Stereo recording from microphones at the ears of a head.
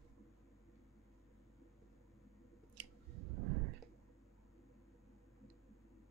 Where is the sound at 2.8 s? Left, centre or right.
Right.